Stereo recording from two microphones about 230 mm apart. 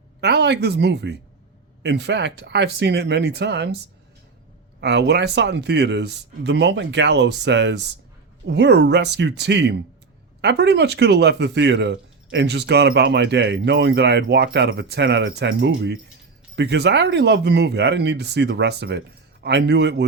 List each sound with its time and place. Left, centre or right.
0.2 s speech: right
4.8 s speech: right